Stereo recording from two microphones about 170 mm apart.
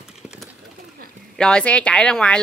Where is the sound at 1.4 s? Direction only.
5° left (ahead or behind).